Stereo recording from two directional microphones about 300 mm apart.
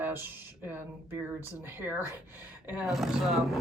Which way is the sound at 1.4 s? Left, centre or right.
Centre.